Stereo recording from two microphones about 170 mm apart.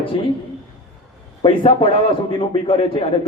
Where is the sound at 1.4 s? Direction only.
30° left (ahead or behind).